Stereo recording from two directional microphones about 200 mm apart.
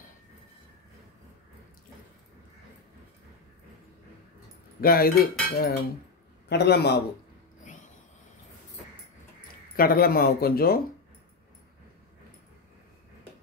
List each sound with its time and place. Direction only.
4.8 s a man's voice: 50° left (ahead or behind)
9.8 s speech: 50° left (ahead or behind)